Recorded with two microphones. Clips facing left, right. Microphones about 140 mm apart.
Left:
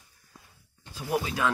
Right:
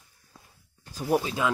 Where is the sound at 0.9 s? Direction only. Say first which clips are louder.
Right 4 dB; 40° right (ahead or behind).